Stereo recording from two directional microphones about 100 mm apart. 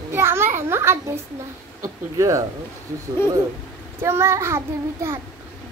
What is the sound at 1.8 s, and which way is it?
Speech, 35° right (ahead or behind).